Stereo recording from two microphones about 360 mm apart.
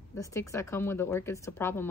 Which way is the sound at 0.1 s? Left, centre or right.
Centre.